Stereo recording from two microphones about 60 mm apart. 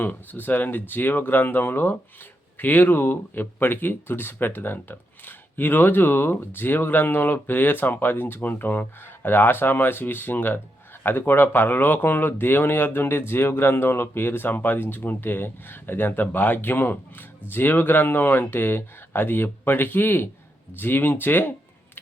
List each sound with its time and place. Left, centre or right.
0.0 s speech: left